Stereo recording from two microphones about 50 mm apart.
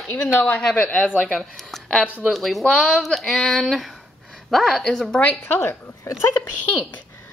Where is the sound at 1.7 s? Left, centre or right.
Centre.